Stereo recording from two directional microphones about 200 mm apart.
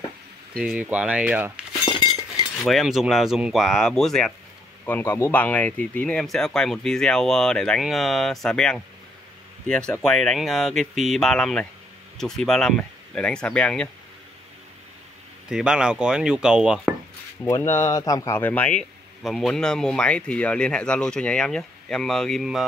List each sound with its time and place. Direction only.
0.6 s speech: 5° right (ahead or behind)
1.9 s chink: 25° left (ahead or behind)
2.6 s speech: centre (ahead or behind)
15.5 s speech: 5° right (ahead or behind)
17.5 s speech: 15° left (ahead or behind)